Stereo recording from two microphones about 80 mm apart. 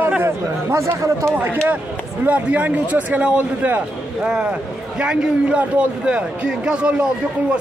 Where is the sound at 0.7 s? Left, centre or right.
Right; by 7.0 s centre.